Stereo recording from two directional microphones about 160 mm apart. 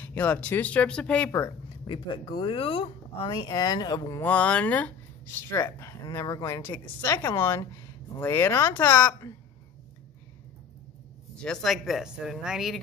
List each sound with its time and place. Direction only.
0.0 s speech: 10° left (ahead or behind)
1.9 s speech: 30° left (ahead or behind)
4.3 s speech: 10° left (ahead or behind)
11.4 s speech: centre (ahead or behind)